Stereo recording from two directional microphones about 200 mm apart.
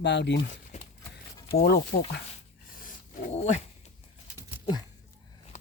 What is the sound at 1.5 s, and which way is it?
Speech, 50° left (ahead or behind).